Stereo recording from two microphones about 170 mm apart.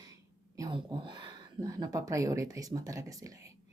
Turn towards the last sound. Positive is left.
turn(degrees=-20)  # may be behind; listen again after turning